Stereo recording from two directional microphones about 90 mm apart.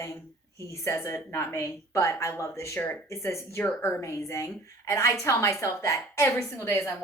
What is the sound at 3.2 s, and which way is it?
Speech, 30° left (ahead or behind).